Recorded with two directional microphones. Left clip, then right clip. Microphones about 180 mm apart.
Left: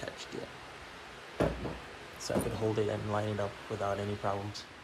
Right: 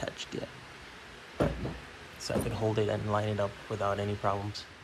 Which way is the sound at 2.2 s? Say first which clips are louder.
Right 1 dB; 10° left (ahead or behind).